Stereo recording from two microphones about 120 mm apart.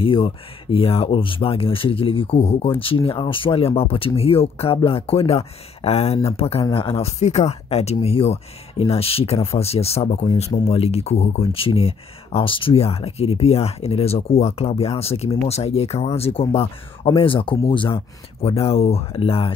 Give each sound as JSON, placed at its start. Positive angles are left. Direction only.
{"t": 0.0, "sound": "speech", "side_deg": 50}